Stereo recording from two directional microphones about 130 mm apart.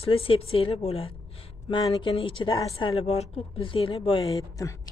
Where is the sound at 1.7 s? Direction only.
40° left (ahead or behind).